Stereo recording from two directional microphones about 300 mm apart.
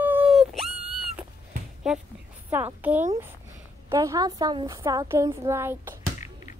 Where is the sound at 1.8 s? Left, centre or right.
Centre.